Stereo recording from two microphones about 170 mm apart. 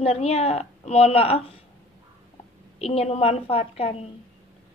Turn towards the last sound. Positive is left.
turn(degrees=35)  # may be behind; listen again after turning